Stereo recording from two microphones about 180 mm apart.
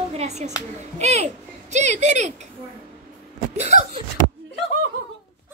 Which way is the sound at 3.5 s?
40° right (ahead or behind).